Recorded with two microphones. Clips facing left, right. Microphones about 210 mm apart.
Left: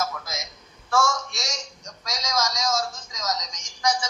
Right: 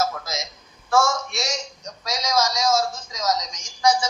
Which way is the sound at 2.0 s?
30° right (ahead or behind).